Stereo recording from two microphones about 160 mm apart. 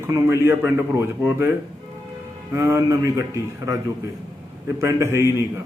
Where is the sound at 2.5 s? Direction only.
15° right (ahead or behind).